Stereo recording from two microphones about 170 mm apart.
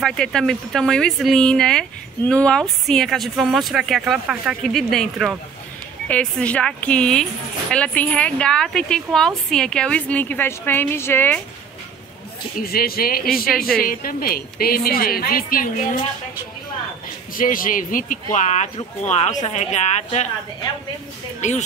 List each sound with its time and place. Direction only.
0.0 s a woman's voice: 5° left (ahead or behind)
12.5 s a woman's voice: 60° left (ahead or behind)
17.4 s speech: 55° left (ahead or behind)
21.4 s speech: 45° left (ahead or behind)